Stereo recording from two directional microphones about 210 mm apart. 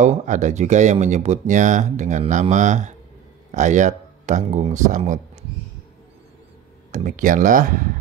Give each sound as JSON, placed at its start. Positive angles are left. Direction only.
{"t": 0.0, "sound": "speech", "side_deg": -35}
{"t": 6.9, "sound": "speech", "side_deg": -35}